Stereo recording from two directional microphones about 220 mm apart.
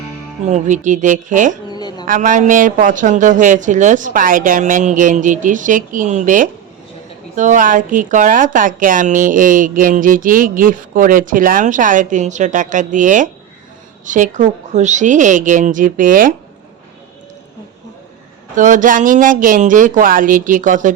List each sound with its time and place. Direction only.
0.4 s speech: 35° right (ahead or behind)
1.7 s a sound: 20° left (ahead or behind)
2.0 s speech: 35° right (ahead or behind)
18.5 s speech: 35° right (ahead or behind)